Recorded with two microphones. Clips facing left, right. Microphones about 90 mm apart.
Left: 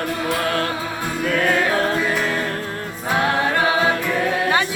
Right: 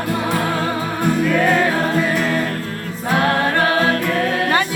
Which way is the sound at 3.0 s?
5° left (ahead or behind).